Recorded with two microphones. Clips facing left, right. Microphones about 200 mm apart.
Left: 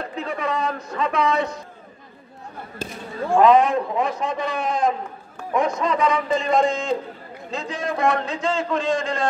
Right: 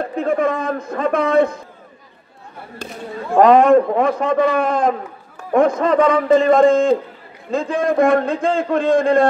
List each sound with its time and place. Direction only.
0.0 s a man's voice: 50° right (ahead or behind)
3.3 s a man's voice: 55° right (ahead or behind)